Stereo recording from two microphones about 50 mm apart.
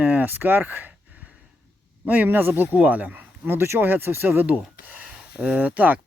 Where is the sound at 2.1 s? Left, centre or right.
Right.